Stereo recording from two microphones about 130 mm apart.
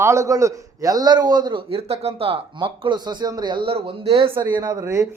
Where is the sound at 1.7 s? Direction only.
50° right (ahead or behind).